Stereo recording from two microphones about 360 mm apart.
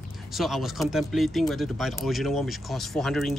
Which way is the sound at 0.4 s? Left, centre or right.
Centre.